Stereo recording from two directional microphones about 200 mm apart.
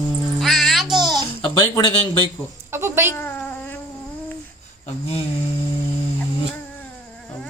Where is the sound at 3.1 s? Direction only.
10° left (ahead or behind).